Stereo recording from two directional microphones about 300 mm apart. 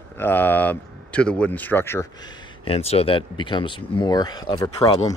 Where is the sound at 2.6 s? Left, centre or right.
Centre.